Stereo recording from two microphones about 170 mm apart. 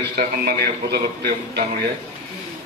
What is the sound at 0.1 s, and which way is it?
A man's voice, 70° right (ahead or behind).